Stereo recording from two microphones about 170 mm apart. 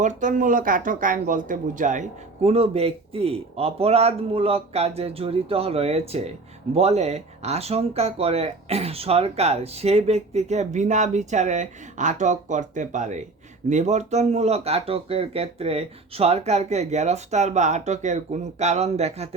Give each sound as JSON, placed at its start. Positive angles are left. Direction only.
{"t": 0.0, "sound": "speech", "side_deg": -50}